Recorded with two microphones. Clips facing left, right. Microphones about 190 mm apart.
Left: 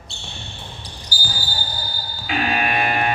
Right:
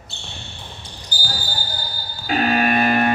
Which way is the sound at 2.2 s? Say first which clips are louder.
Right 4 dB; 40° right (ahead or behind).